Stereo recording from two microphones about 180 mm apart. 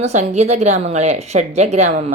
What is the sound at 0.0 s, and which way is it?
Speech, 40° right (ahead or behind).